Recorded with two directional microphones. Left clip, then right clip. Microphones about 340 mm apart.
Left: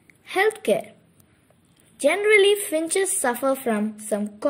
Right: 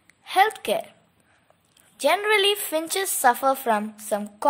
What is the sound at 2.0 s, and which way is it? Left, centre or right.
Speech, centre.